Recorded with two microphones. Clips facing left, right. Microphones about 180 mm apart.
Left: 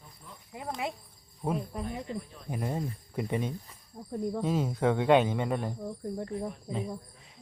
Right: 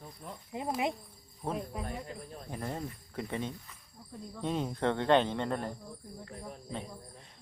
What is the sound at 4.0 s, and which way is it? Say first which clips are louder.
Speech: left 11 dB; 50° left (ahead or behind).